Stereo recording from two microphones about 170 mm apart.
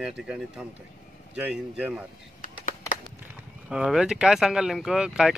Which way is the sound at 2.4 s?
50° left (ahead or behind).